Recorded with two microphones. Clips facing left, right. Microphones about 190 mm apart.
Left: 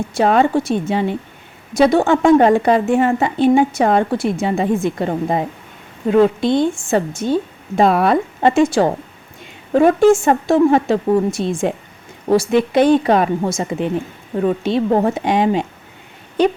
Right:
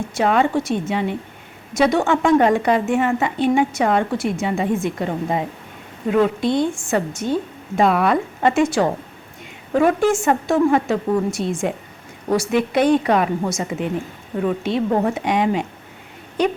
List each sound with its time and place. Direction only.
0.2 s a woman's voice: 35° left (ahead or behind)